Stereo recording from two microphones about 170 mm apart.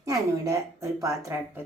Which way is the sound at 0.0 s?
20° right (ahead or behind).